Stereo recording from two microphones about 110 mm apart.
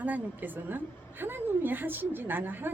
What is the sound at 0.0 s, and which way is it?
A woman's voice, 15° right (ahead or behind).